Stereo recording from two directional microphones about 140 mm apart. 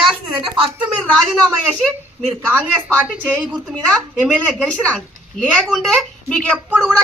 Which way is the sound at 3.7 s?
5° left (ahead or behind).